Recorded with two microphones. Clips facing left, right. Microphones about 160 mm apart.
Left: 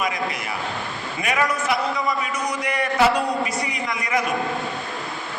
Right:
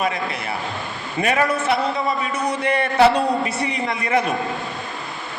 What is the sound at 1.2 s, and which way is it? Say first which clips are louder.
A man's voice: right 4 dB; 30° right (ahead or behind).